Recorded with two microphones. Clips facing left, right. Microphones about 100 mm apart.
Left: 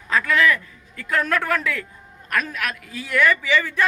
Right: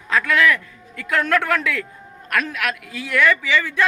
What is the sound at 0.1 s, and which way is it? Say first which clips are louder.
A man's voice: right 1 dB; 5° left (ahead or behind).